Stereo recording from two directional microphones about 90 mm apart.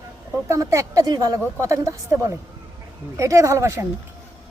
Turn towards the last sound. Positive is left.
turn(degrees=-30)  # may be behind; listen again after turning